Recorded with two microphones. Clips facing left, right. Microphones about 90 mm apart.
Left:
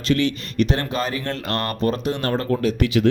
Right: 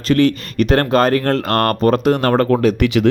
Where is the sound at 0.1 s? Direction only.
45° right (ahead or behind).